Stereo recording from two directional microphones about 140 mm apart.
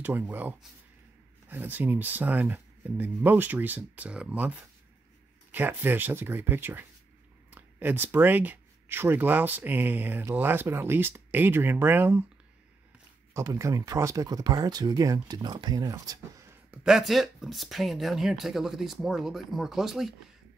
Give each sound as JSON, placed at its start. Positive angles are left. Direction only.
{"t": 0.0, "sound": "speech", "side_deg": -15}
{"t": 13.3, "sound": "speech", "side_deg": -20}
{"t": 16.8, "sound": "speech", "side_deg": 0}